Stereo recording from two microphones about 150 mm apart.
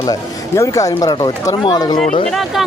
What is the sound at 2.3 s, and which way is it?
Speech, centre (ahead or behind).